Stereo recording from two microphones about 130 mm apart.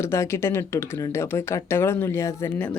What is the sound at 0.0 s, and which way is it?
Speech, 20° left (ahead or behind).